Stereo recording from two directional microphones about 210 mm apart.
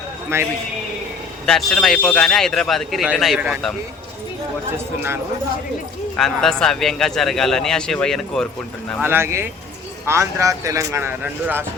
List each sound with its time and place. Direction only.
0.3 s a man's voice: 10° right (ahead or behind)
1.5 s a man's voice: centre (ahead or behind)
6.1 s a man's voice: centre (ahead or behind)
9.0 s a man's voice: 10° right (ahead or behind)